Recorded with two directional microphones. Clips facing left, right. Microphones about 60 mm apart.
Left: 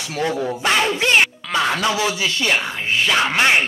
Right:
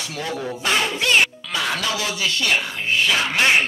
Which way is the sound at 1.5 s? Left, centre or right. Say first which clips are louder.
Left 7 dB; left.